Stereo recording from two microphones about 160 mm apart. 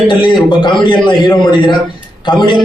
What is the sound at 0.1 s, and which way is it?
A man's voice, 30° left (ahead or behind).